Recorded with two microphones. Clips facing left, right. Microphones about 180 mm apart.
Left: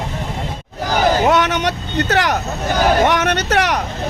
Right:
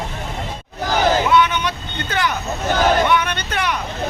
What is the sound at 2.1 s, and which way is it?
Speech, 70° left (ahead or behind).